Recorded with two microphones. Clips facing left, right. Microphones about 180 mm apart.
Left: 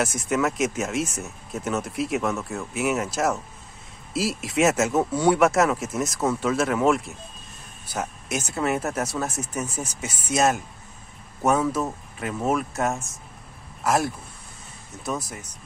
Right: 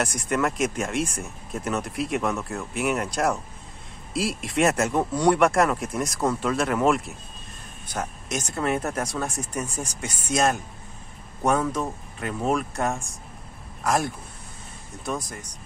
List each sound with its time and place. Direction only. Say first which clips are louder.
0.0 s speech: left 1 dB; centre (ahead or behind)